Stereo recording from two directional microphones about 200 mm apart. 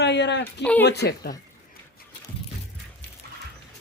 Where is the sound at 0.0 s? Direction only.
60° left (ahead or behind).